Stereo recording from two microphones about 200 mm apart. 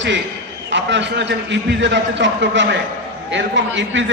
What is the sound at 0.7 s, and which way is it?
A man's voice, 65° right (ahead or behind).